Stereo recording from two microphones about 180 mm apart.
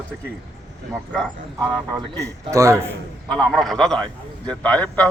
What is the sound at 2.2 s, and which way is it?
Speech, 15° right (ahead or behind).